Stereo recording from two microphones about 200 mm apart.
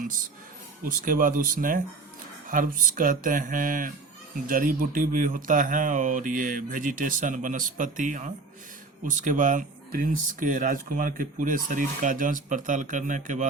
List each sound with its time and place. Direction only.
0.9 s speech: 45° right (ahead or behind)
2.9 s speech: 45° right (ahead or behind)